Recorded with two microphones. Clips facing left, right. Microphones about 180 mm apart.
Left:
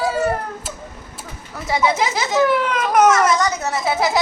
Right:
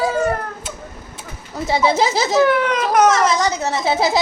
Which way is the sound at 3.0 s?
30° right (ahead or behind).